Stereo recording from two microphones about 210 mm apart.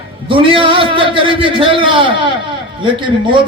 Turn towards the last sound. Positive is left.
turn(degrees=-25)  # may be behind; listen again after turning